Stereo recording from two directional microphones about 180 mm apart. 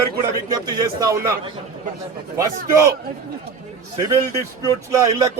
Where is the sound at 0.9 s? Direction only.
20° right (ahead or behind).